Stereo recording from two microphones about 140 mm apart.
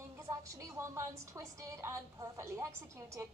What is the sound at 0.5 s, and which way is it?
Speech, 20° right (ahead or behind).